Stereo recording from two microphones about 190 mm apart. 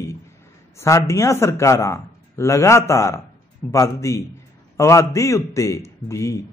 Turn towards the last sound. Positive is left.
turn(degrees=15)  # may be behind; listen again after turning